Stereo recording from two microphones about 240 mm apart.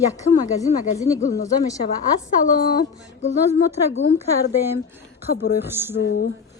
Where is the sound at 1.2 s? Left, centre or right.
Left.